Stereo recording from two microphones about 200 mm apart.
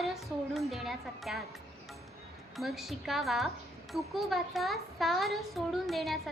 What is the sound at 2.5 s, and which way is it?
A woman's voice, centre (ahead or behind).